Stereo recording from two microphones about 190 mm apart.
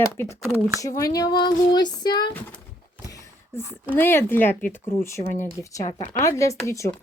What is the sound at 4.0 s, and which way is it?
Speech, 10° left (ahead or behind).